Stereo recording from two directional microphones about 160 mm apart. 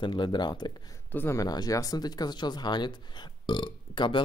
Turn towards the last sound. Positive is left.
turn(degrees=30)  # may be behind; listen again after turning